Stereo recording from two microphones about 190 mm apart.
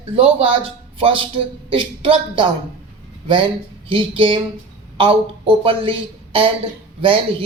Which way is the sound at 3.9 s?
25° right (ahead or behind).